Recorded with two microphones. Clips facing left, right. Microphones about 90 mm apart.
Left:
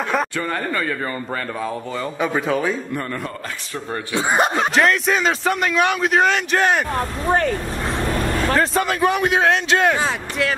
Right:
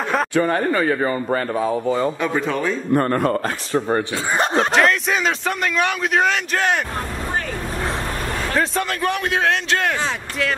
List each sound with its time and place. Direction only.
0.3 s speech: 20° right (ahead or behind)
2.2 s a man's voice: 5° left (ahead or behind)
2.9 s a man's voice: 45° right (ahead or behind)
4.7 s a man's voice: centre (ahead or behind)
8.5 s a man's voice: 5° left (ahead or behind)